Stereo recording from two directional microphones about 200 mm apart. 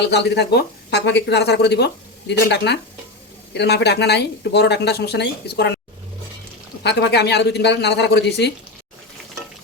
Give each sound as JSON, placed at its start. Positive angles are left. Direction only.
{"t": 0.0, "sound": "speech", "side_deg": 55}
{"t": 6.8, "sound": "speech", "side_deg": 55}